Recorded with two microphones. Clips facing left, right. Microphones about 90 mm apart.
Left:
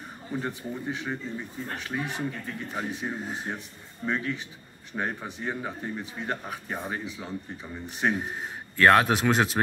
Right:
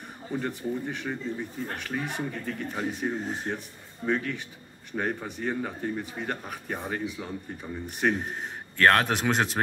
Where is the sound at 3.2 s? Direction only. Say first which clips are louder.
Right 2 dB; 10° left (ahead or behind).